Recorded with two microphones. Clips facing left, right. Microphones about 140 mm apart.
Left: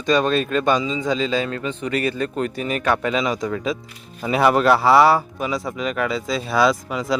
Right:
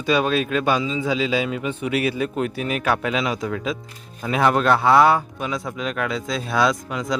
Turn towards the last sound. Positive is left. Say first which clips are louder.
# left 2 dB
turn(degrees=5)  # may be behind; listen again after turning